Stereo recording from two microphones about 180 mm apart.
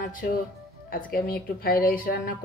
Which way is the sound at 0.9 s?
55° left (ahead or behind).